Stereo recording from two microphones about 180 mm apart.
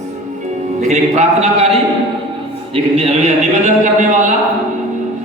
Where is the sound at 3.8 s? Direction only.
45° right (ahead or behind).